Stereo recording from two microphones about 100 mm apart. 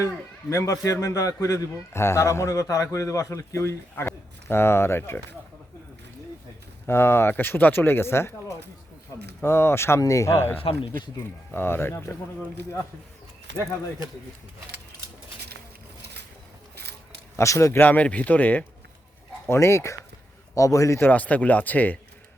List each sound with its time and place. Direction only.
0.5 s a man's voice: 35° left (ahead or behind)
6.8 s a man's voice: 25° left (ahead or behind)
10.6 s speech: 70° left (ahead or behind)
11.2 s a man's voice: 20° left (ahead or behind)
17.3 s speech: 30° left (ahead or behind)
19.5 s a man's voice: 30° left (ahead or behind)
21.1 s speech: 15° left (ahead or behind)